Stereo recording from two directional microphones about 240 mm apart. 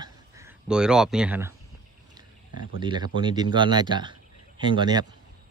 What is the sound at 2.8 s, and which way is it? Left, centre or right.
Speech, centre.